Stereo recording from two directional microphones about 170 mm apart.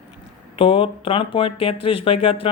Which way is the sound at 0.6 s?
30° left (ahead or behind).